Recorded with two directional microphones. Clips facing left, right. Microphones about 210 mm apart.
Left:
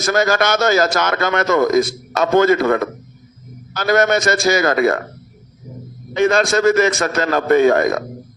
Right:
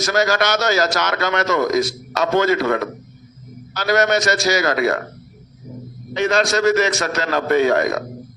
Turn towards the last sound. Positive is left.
turn(degrees=50)  # may be behind; listen again after turning